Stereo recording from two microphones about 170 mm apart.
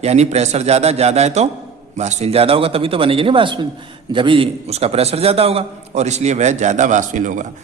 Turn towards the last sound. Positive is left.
turn(degrees=-50)  # may be behind; listen again after turning